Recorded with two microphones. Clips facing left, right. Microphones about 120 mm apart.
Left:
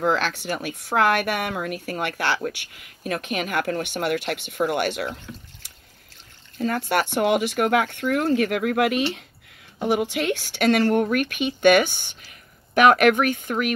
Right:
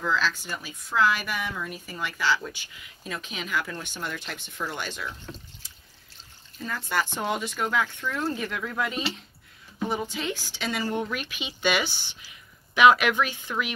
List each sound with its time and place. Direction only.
0.0 s a woman's voice: 65° left (ahead or behind)
6.6 s a woman's voice: 65° left (ahead or behind)